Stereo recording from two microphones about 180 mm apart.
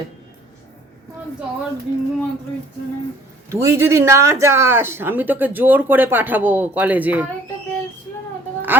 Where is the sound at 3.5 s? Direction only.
15° right (ahead or behind).